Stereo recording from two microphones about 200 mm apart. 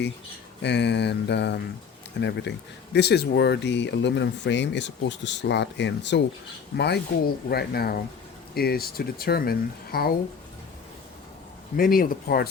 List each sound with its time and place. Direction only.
0.6 s speech: 60° left (ahead or behind)
11.8 s speech: 45° left (ahead or behind)